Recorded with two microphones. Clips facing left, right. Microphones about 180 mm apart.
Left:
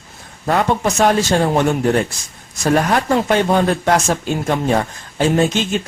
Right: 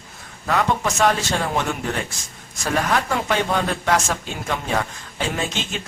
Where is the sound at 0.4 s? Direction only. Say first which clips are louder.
Left 4 dB; 35° left (ahead or behind).